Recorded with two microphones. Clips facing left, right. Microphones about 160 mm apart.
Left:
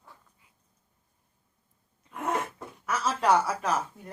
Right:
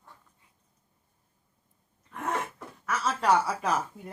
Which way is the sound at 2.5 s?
15° left (ahead or behind).